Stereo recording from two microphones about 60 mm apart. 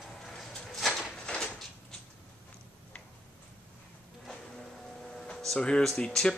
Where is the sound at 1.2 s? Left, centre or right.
Centre.